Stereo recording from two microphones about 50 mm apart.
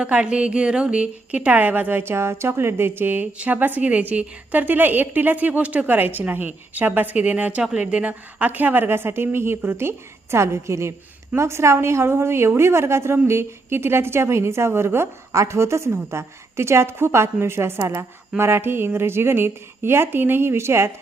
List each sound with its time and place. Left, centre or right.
0.0 s a woman's voice: right
6.0 s a woman's voice: right
10.3 s a woman's voice: right